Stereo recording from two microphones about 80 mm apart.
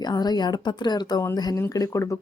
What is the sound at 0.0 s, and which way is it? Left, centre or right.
Speech, left.